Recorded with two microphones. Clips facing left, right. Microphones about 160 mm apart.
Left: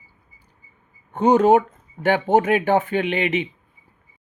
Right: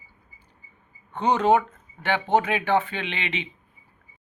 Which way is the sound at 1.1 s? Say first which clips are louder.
Left 5 dB; 45° left (ahead or behind).